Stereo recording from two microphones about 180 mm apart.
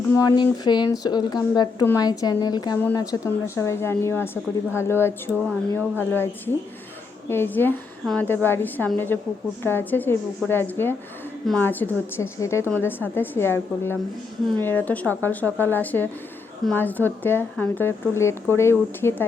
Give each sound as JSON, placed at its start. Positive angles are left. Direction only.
{"t": 0.1, "sound": "a woman's voice", "side_deg": 20}